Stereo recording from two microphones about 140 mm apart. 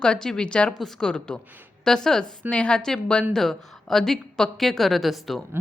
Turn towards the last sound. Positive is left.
turn(degrees=0)  # may be behind; listen again after turning